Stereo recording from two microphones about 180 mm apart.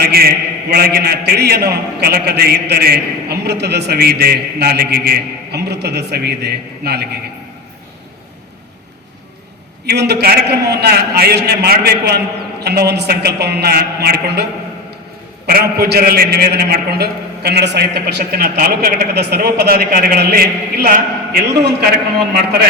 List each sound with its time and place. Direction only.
0.0 s a man's voice: 55° right (ahead or behind)
9.8 s a man's voice: 65° right (ahead or behind)
15.4 s a man's voice: 60° right (ahead or behind)